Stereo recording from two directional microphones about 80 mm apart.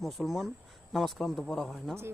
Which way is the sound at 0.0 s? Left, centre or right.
Centre.